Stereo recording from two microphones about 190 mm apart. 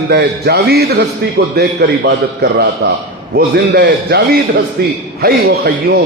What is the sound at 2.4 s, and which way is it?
A man's voice, 55° right (ahead or behind).